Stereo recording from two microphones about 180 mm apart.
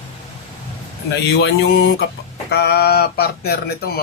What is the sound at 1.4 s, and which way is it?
Mantra, 90° left.